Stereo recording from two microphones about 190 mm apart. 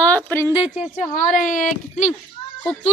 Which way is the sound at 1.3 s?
45° left (ahead or behind).